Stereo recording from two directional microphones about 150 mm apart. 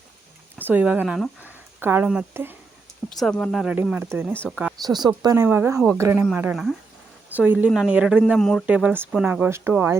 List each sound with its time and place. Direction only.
0.6 s speech: 10° right (ahead or behind)
3.1 s speech: 5° left (ahead or behind)
3.8 s speech: 10° right (ahead or behind)
4.8 s speech: 30° right (ahead or behind)
5.5 s speech: 15° right (ahead or behind)
8.4 s speech: 5° left (ahead or behind)
8.6 s speech: 10° right (ahead or behind)